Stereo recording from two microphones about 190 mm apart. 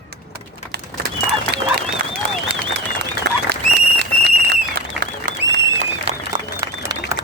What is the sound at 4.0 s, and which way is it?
Whistle, 60° right (ahead or behind).